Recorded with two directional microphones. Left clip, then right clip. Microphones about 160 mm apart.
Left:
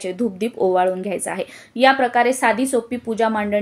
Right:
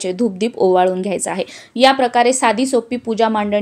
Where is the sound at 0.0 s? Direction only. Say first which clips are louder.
Right 4 dB; 25° right (ahead or behind).